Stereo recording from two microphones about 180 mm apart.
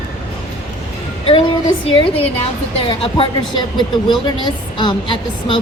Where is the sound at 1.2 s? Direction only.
30° left (ahead or behind).